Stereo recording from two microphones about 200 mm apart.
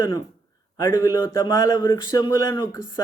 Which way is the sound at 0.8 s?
20° left (ahead or behind).